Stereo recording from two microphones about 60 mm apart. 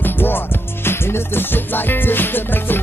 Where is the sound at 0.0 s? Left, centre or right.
Left.